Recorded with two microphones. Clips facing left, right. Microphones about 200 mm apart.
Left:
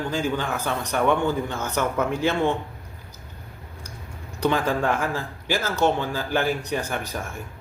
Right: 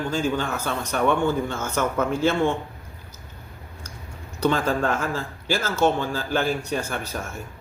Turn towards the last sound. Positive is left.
turn(degrees=15)  # may be behind; listen again after turning